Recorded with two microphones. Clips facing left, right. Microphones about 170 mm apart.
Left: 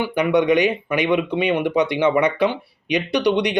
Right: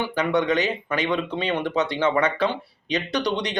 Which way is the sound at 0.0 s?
15° left (ahead or behind).